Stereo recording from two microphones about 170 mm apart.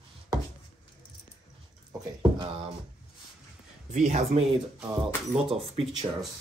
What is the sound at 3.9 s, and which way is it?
Speech, 45° right (ahead or behind).